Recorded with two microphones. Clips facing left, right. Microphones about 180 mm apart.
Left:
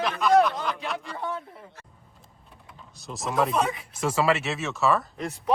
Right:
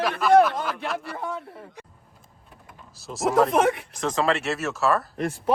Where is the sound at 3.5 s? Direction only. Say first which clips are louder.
Right 5 dB; 70° right (ahead or behind).